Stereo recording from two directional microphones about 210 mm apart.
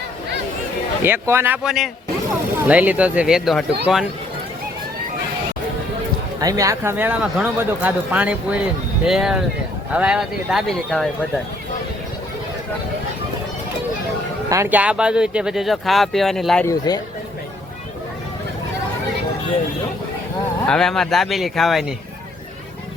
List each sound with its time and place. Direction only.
1.0 s speech: 10° right (ahead or behind)
6.4 s speech: 15° right (ahead or behind); by 11.1 s centre (ahead or behind)
14.5 s speech: 10° right (ahead or behind)
16.6 s speech: 20° left (ahead or behind)
20.7 s speech: 5° left (ahead or behind)